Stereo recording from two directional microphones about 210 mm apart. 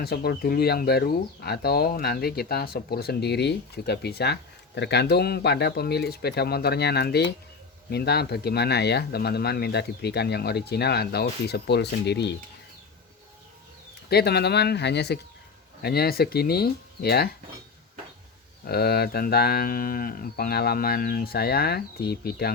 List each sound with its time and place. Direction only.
0.0 s speech: 50° left (ahead or behind)
14.1 s speech: 50° left (ahead or behind)
18.6 s speech: 50° left (ahead or behind)